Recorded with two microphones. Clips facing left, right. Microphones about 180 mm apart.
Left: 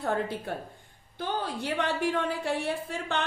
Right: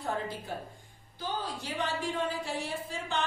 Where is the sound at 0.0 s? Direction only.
65° left (ahead or behind).